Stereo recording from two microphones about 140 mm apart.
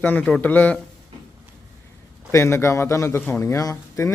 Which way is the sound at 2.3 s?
20° left (ahead or behind).